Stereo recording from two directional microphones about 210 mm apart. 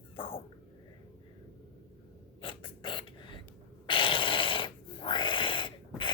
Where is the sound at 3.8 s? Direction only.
25° left (ahead or behind).